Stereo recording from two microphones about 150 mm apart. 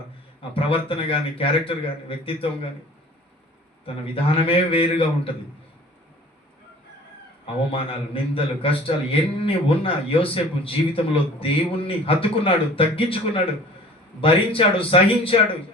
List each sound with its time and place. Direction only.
0.5 s a man's voice: 35° left (ahead or behind)
3.8 s a man's voice: 40° left (ahead or behind)
7.4 s a man's voice: 35° left (ahead or behind)